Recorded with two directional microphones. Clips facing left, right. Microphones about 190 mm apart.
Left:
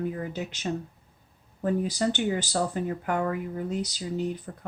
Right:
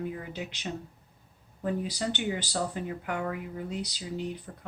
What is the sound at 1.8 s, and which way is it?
Speech, 45° left (ahead or behind).